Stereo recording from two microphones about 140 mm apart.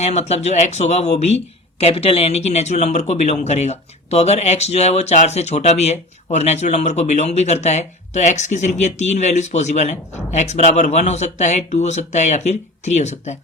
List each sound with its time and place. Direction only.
0.0 s speech: 50° left (ahead or behind)